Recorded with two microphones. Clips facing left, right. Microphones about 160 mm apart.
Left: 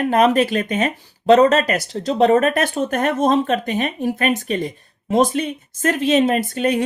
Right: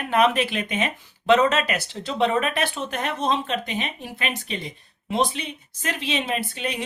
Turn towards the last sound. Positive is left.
turn(degrees=45)  # may be behind; listen again after turning